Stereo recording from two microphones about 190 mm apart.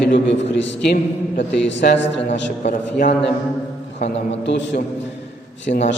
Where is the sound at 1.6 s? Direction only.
70° left (ahead or behind).